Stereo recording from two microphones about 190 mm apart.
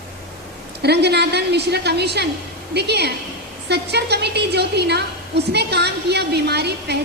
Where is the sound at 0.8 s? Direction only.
60° right (ahead or behind).